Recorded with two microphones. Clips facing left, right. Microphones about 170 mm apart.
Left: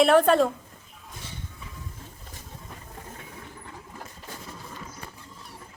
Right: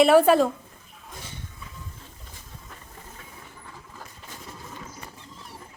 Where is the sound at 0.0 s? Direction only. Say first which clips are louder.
Right 2 dB; 5° right (ahead or behind).